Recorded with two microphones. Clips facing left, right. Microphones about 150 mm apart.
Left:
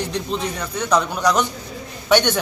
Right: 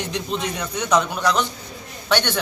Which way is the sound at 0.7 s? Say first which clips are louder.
Left 1 dB; 35° left (ahead or behind).